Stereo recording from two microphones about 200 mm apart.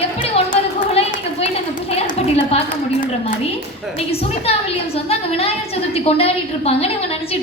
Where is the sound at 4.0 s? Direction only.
30° left (ahead or behind).